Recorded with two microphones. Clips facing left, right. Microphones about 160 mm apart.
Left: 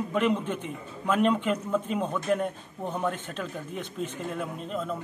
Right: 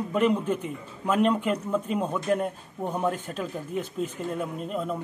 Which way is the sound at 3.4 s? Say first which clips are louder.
Right 4 dB; 5° right (ahead or behind).